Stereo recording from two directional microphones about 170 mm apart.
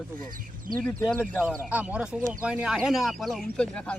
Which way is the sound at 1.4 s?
10° right (ahead or behind).